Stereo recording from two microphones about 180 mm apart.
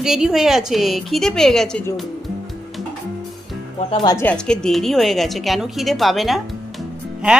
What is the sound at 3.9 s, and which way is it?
Speech, 20° left (ahead or behind).